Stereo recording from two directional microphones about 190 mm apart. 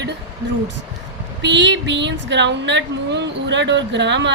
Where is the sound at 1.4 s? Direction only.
70° right (ahead or behind).